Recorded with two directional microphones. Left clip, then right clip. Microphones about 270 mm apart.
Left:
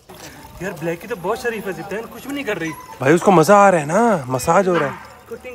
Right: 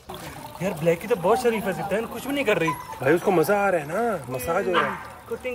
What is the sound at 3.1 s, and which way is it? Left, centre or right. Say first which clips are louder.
Speech: left 8 dB; left.